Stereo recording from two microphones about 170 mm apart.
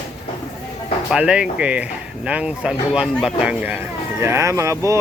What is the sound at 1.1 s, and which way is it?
Speech, 5° right (ahead or behind).